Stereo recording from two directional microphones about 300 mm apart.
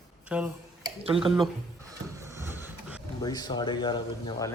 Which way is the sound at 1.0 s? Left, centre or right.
Centre.